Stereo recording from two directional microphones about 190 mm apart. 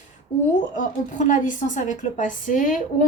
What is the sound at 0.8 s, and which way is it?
A woman's voice, 45° left (ahead or behind).